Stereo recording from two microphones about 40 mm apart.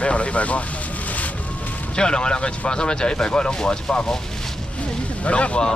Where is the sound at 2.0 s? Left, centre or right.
Left.